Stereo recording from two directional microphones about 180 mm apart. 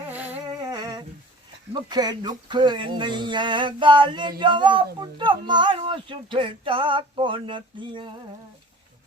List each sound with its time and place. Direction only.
0.1 s humming: 10° right (ahead or behind)
0.6 s humming: 20° right (ahead or behind)
1.7 s speech: 25° right (ahead or behind)